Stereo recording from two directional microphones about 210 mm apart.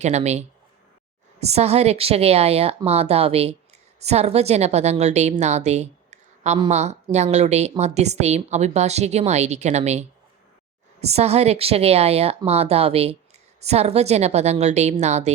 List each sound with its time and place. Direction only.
0.0 s a woman's voice: 35° right (ahead or behind)